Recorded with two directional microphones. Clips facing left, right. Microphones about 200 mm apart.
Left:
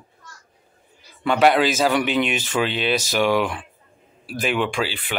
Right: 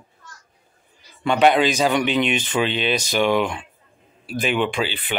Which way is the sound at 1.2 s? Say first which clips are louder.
Even; centre (ahead or behind).